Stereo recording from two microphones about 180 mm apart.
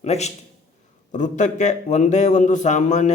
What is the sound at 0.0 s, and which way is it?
Speech, 40° left (ahead or behind).